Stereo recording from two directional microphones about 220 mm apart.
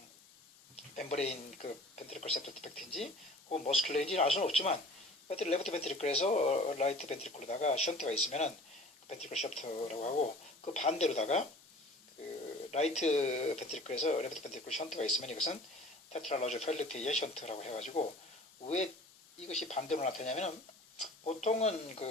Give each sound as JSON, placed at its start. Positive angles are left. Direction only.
{"t": 0.9, "sound": "speech", "side_deg": 30}
{"t": 12.7, "sound": "speech", "side_deg": 30}
{"t": 19.5, "sound": "speech", "side_deg": 30}